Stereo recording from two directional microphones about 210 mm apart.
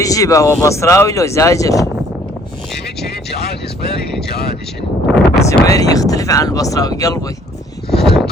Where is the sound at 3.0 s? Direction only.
50° left (ahead or behind).